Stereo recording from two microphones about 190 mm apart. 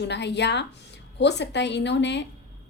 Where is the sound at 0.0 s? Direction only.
65° left (ahead or behind).